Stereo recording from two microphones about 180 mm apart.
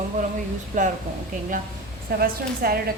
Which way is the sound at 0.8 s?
45° right (ahead or behind).